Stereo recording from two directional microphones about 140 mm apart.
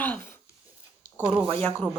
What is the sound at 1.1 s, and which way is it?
Speech, 10° right (ahead or behind).